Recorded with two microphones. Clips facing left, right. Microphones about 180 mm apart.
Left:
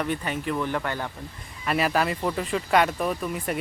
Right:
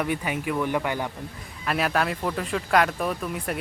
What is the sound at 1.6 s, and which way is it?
Speech, centre (ahead or behind).